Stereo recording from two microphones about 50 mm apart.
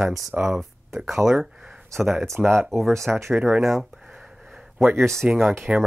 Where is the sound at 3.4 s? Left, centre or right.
Centre.